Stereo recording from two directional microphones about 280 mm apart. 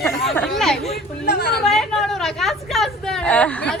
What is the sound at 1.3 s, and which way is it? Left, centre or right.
Speech, left.